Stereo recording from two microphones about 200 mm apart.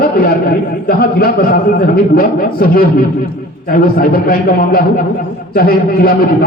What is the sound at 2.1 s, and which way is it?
Speech, 50° left (ahead or behind).